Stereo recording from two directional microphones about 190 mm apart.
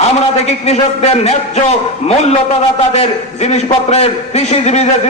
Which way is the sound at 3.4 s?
35° left (ahead or behind).